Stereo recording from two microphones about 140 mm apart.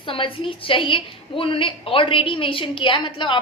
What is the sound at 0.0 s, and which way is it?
A woman's voice, 40° left (ahead or behind).